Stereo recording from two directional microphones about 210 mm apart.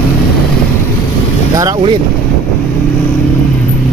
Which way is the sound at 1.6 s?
15° right (ahead or behind).